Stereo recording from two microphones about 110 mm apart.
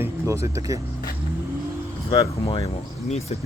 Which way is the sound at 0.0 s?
25° right (ahead or behind).